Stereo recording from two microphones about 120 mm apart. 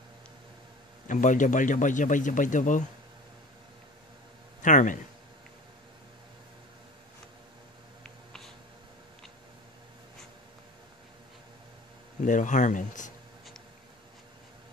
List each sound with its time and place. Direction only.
1.0 s a man's voice: 90° left
4.6 s speech: 90° left
8.0 s a sound: 5° left (ahead or behind)
12.2 s a man's voice: 90° left